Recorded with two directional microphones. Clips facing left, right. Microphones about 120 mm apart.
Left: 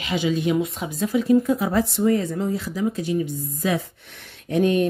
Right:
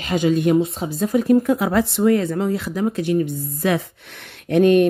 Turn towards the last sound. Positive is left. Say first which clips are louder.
# right 6 dB
turn(degrees=-65)  # may be behind; listen again after turning